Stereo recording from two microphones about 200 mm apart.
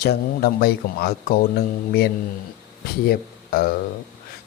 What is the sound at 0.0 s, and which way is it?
Speech, 50° left (ahead or behind).